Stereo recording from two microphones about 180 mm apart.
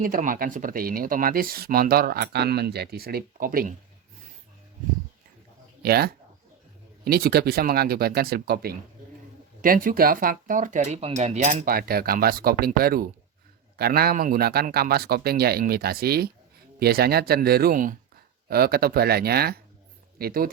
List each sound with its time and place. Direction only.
0.0 s speech: 50° right (ahead or behind)
5.8 s speech: 60° right (ahead or behind)